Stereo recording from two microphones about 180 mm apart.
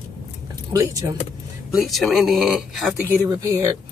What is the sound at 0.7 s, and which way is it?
Speech, 20° right (ahead or behind).